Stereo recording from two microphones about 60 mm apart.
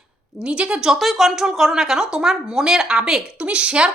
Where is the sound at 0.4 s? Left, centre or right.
Centre.